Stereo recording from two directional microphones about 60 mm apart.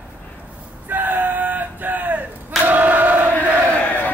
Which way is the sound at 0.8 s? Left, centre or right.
Right.